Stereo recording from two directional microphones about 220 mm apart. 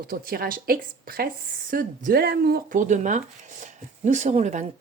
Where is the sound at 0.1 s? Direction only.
40° right (ahead or behind).